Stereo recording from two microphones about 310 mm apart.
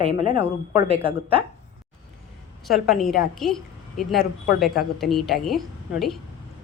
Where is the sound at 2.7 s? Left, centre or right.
Centre.